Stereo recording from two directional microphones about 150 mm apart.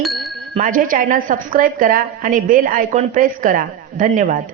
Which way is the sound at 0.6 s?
65° right (ahead or behind).